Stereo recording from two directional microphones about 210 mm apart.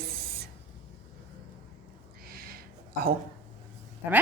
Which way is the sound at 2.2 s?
45° right (ahead or behind).